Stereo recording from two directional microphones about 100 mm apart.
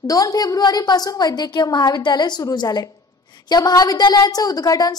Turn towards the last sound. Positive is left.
turn(degrees=40)  # may be behind; listen again after turning